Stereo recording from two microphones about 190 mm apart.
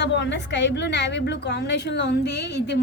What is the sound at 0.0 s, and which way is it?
A woman's voice, 65° left (ahead or behind).